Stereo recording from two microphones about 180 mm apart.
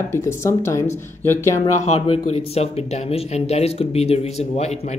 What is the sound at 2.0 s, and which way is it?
Speech, 35° left (ahead or behind).